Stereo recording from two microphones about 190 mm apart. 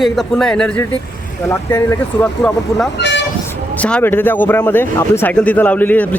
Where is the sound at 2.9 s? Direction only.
65° left (ahead or behind).